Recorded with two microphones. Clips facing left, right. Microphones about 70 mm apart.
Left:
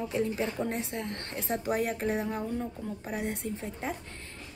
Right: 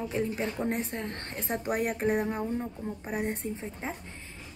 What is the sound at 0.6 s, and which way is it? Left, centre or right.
Speech, right.